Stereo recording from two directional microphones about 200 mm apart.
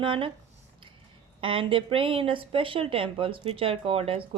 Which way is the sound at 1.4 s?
25° right (ahead or behind).